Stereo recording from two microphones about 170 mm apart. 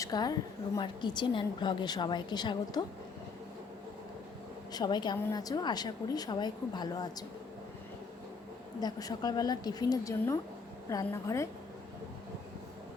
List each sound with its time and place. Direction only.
0.0 s a woman's voice: 25° left (ahead or behind)
4.7 s a woman's voice: 25° left (ahead or behind)
8.8 s a woman's voice: 20° left (ahead or behind)